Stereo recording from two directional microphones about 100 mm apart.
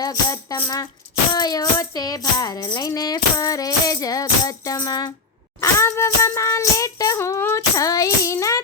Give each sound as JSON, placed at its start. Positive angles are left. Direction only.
{"t": 0.0, "sound": "speech", "side_deg": 35}
{"t": 5.5, "sound": "speech", "side_deg": 25}